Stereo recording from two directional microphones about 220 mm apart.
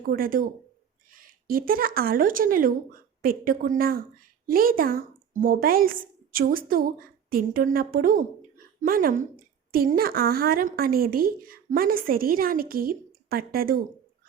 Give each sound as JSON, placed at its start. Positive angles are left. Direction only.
{"t": 0.1, "sound": "a woman's voice", "side_deg": -40}